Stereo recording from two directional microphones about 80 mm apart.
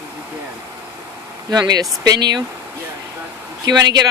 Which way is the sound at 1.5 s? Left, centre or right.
Right.